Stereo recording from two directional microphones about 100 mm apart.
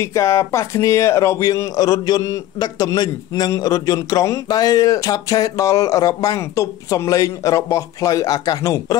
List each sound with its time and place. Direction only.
0.0 s speech: 30° left (ahead or behind)